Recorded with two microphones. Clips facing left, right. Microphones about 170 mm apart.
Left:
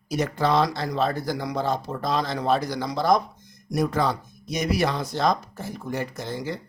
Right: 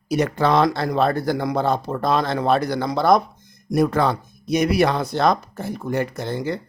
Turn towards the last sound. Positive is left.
turn(degrees=-60)  # may be behind; listen again after turning